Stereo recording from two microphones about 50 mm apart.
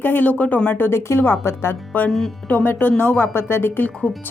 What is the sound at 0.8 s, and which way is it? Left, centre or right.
A woman's voice, left.